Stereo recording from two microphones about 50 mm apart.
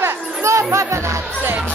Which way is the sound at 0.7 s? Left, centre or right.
Right.